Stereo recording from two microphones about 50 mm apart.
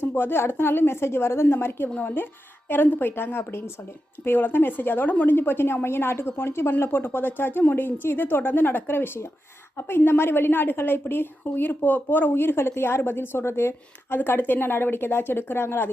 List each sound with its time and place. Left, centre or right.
0.0 s a woman's voice: left
14.3 s a woman's voice: left